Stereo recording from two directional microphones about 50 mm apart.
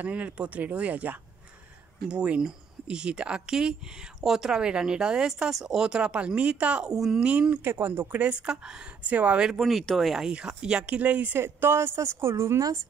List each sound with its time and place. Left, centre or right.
0.0 s speech: right; by 7.2 s centre
7.2 s speech: right
7.6 s speech: right
8.2 s speech: right
9.0 s speech: right
9.4 s speech: centre
10.3 s speech: centre
11.0 s speech: right
11.3 s a woman's voice: right